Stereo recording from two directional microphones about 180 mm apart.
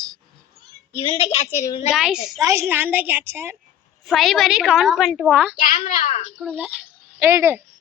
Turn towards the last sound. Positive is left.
turn(degrees=-15)  # may be behind; listen again after turning